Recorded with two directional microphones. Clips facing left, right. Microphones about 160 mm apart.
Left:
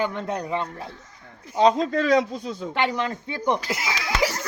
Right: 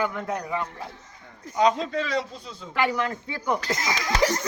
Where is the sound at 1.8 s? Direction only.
45° left (ahead or behind).